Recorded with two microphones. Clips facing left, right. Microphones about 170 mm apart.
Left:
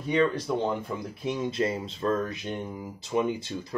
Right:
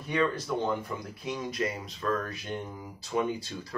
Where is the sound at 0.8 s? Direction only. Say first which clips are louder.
Left 4 dB; 25° left (ahead or behind).